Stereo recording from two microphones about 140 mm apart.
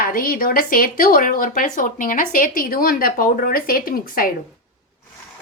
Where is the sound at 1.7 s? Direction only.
75° left (ahead or behind).